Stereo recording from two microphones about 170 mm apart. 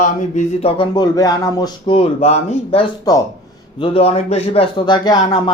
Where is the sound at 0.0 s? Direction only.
45° left (ahead or behind).